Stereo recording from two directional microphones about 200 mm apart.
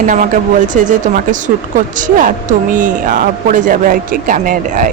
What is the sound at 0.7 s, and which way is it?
Speech, 40° right (ahead or behind).